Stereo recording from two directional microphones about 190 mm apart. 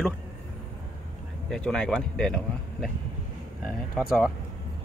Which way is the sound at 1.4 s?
5° left (ahead or behind).